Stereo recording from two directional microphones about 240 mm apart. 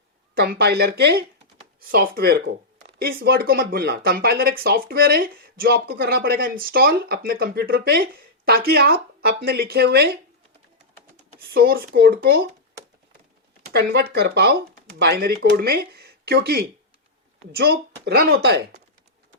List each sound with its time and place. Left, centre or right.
0.3 s speech: right
11.5 s speech: right
13.7 s speech: right